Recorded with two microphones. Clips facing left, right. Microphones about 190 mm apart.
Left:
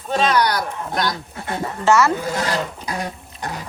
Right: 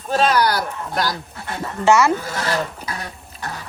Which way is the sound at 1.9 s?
15° right (ahead or behind).